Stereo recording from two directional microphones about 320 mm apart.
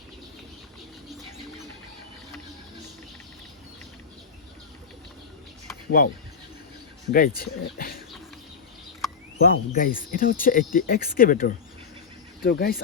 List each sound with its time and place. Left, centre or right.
7.1 s speech: left
9.4 s speech: left